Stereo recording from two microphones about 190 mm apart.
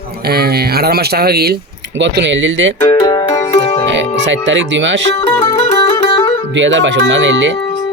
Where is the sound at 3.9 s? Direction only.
70° right (ahead or behind).